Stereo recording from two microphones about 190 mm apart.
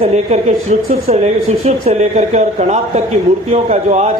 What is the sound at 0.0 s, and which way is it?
Speech, 35° right (ahead or behind).